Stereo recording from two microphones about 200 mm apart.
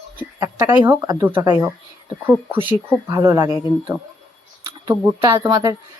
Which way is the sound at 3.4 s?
25° left (ahead or behind).